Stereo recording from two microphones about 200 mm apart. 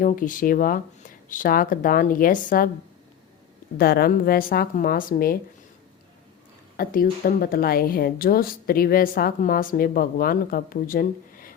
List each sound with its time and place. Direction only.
0.0 s speech: 40° left (ahead or behind)
3.8 s speech: 50° left (ahead or behind)
6.7 s speech: 45° left (ahead or behind)